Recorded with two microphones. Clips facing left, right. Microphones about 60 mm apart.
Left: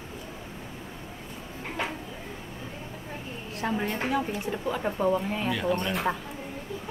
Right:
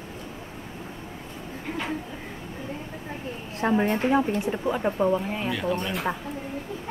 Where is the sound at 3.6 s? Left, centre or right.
Right; by 6.2 s centre.